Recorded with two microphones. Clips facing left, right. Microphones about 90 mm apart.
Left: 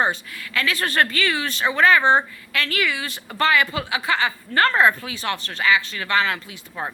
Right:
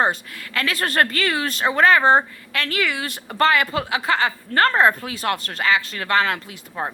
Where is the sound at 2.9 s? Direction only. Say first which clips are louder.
Right 1 dB; 50° right (ahead or behind).